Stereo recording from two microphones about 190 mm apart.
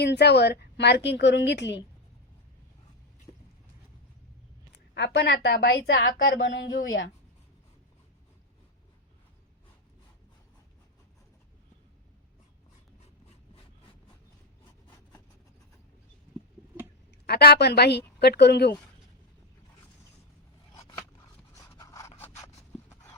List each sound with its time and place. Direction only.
0.0 s a woman's voice: 65° left (ahead or behind)
3.3 s vehicle: 25° left (ahead or behind)
4.9 s a woman's voice: 65° left (ahead or behind); by 7.0 s 85° left
17.2 s a woman's voice: 55° left (ahead or behind)
21.5 s a sound: 15° left (ahead or behind)